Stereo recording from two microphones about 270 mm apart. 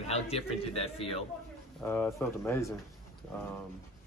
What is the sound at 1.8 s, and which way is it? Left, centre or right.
Speech, centre.